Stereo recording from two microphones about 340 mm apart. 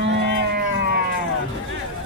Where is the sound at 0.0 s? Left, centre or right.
Right.